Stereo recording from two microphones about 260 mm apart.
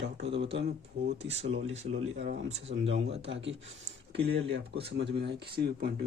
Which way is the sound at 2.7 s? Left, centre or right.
Right.